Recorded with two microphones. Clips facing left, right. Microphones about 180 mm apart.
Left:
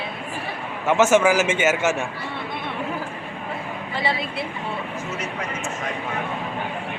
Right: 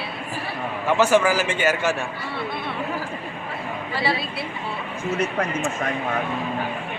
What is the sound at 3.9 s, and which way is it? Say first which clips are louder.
Speech: even; 20° left (ahead or behind).